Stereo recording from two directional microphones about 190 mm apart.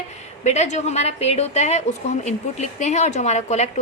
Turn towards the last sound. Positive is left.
turn(degrees=35)  # may be behind; listen again after turning